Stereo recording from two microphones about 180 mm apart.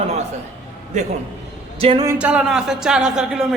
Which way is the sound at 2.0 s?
5° right (ahead or behind).